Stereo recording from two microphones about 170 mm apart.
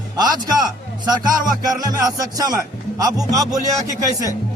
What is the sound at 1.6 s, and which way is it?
Speech, 20° right (ahead or behind).